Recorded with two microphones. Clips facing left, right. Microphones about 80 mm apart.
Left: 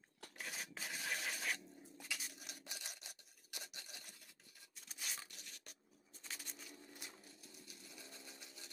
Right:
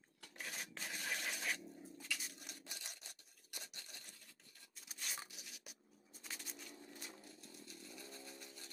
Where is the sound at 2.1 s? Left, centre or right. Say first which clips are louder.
Even; centre.